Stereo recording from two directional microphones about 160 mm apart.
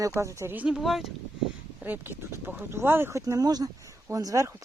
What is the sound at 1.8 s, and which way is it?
Speech, 10° right (ahead or behind).